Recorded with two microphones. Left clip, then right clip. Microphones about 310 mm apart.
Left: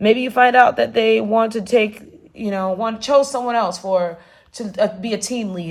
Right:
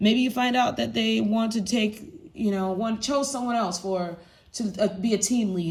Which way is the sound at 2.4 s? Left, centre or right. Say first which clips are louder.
Left 6 dB; centre.